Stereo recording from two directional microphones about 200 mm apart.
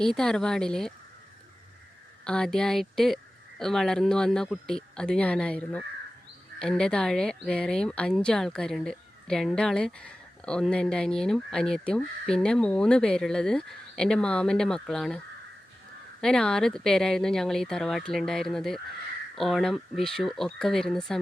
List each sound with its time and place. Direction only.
0.0 s speech: centre (ahead or behind)
2.2 s speech: 5° left (ahead or behind)
16.2 s speech: 5° left (ahead or behind)